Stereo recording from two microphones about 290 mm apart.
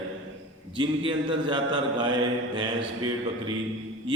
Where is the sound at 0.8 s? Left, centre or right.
Centre.